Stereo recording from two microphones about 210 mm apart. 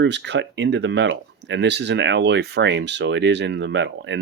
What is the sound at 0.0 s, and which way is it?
Speech, 55° right (ahead or behind).